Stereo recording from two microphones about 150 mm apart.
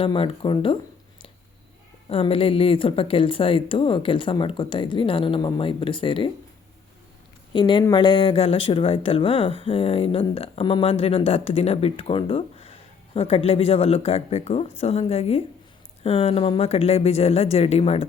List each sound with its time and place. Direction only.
0.0 s speech: 35° left (ahead or behind)
2.0 s speech: 40° left (ahead or behind)
7.5 s speech: 30° left (ahead or behind)